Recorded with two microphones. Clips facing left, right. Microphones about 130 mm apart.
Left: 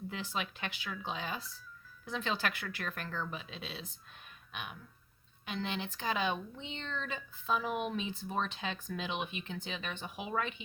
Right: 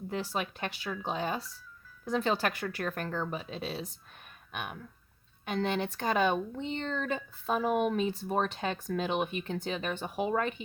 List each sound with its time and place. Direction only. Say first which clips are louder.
0.1 s speech: right 8 dB; 45° right (ahead or behind)
4.5 s speech: right 6 dB; 50° right (ahead or behind)